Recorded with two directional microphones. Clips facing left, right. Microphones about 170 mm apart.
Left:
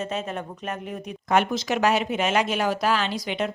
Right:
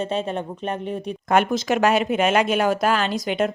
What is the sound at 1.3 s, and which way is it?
Speech, 50° right (ahead or behind).